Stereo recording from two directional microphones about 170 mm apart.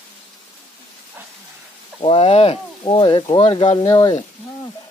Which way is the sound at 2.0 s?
35° left (ahead or behind).